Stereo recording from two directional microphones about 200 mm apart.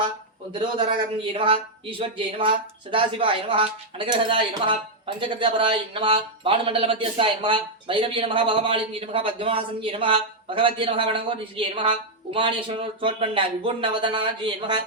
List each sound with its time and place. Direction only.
0.9 s speech: 25° right (ahead or behind)